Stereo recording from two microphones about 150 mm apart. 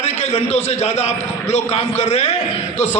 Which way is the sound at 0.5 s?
45° left (ahead or behind).